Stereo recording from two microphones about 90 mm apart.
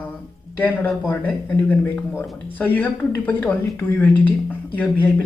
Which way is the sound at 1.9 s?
20° left (ahead or behind).